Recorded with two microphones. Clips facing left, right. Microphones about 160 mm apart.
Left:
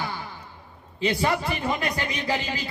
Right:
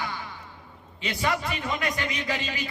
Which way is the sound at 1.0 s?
30° left (ahead or behind).